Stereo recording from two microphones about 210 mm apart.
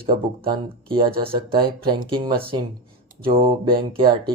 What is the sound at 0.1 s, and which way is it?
Speech, 45° right (ahead or behind).